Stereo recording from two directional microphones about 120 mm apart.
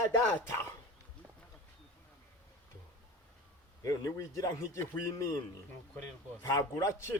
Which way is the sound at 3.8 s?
30° left (ahead or behind).